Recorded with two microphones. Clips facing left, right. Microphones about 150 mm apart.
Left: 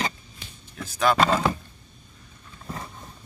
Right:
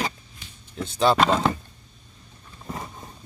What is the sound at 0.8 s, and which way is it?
Speech, 30° right (ahead or behind).